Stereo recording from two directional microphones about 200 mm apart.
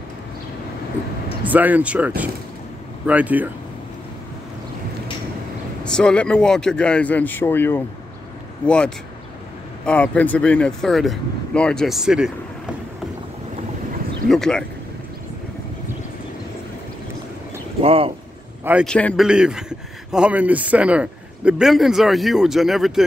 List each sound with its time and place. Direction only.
1.4 s speech: 10° right (ahead or behind)
5.9 s a man's voice: 5° left (ahead or behind)
14.3 s speech: centre (ahead or behind)
17.8 s speech: 30° right (ahead or behind)
18.6 s a man's voice: 10° right (ahead or behind)
18.9 s a man's voice: 5° left (ahead or behind)